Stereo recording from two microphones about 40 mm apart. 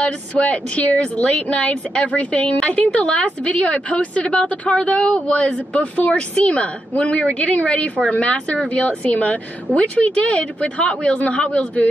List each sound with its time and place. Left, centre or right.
0.0 s a woman's voice: left